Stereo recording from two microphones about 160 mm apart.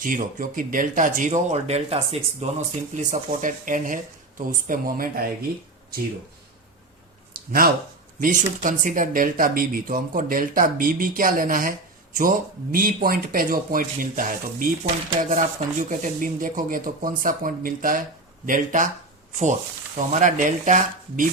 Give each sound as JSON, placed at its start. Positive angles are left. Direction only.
{"t": 0.0, "sound": "speech", "side_deg": -55}
{"t": 7.3, "sound": "a sound", "side_deg": -65}
{"t": 8.2, "sound": "speech", "side_deg": -55}
{"t": 20.1, "sound": "speech", "side_deg": -55}